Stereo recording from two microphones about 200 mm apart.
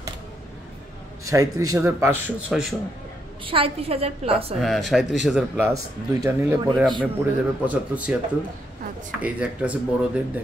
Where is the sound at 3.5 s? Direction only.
25° right (ahead or behind).